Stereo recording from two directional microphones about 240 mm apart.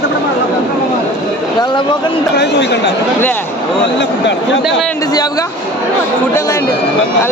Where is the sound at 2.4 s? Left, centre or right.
Left.